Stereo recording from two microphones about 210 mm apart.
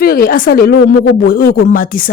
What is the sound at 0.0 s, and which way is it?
Speech, 45° left (ahead or behind).